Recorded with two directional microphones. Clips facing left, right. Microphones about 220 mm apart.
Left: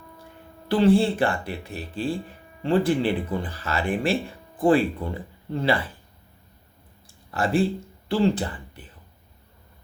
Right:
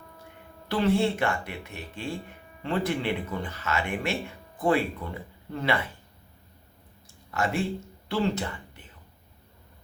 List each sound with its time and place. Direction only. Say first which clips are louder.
0.7 s speech: left 5 dB; 30° left (ahead or behind)
7.3 s speech: left 5 dB; 35° left (ahead or behind)